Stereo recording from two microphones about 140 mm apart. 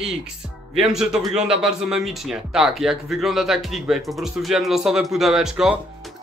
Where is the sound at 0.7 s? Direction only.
5° right (ahead or behind).